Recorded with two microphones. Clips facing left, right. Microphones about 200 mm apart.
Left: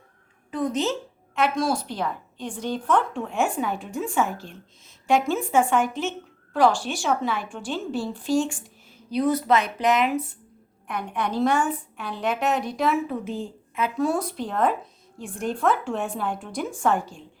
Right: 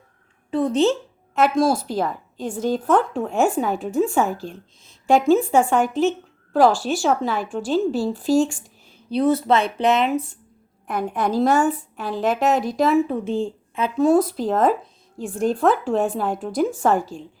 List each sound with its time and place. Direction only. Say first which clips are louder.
0.5 s speech: right 7 dB; 30° right (ahead or behind)
1.4 s a woman's voice: right 5 dB; 40° right (ahead or behind)
5.3 s a woman's voice: right 5 dB; 40° right (ahead or behind)
9.0 s speech: right 3 dB; 30° right (ahead or behind)
10.8 s a woman's voice: right 5 dB; 40° right (ahead or behind)
14.3 s a woman's voice: right 5 dB; 40° right (ahead or behind)